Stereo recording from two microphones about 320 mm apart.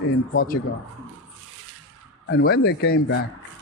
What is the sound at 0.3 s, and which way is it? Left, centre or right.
Speech, left.